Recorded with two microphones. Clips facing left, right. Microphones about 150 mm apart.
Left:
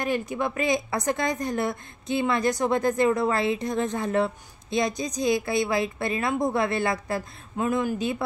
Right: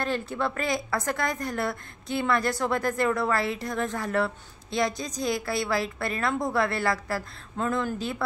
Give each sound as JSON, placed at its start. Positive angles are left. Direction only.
{"t": 0.0, "sound": "a woman's voice", "side_deg": 15}